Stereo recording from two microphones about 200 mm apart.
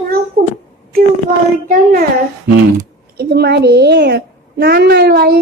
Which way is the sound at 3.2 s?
55° right (ahead or behind).